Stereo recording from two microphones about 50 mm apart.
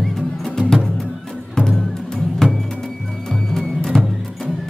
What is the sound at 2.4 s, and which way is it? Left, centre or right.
Music, centre.